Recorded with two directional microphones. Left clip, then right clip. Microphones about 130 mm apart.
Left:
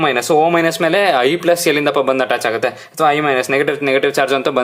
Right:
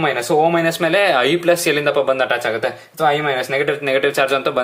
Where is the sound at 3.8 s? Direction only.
35° left (ahead or behind).